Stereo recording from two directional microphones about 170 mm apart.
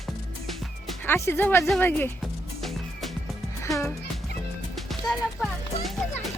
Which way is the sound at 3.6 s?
20° left (ahead or behind).